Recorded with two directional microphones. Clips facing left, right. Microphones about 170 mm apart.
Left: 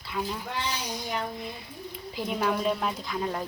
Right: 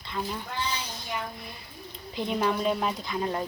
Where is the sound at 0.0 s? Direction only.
5° left (ahead or behind).